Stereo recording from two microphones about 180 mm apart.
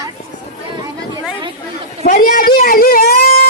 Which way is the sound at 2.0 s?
45° left (ahead or behind).